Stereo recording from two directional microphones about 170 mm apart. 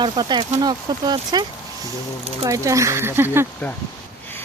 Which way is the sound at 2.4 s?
20° right (ahead or behind).